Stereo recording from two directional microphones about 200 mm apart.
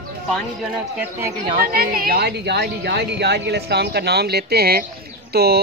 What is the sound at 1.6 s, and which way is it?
Speech, 50° right (ahead or behind).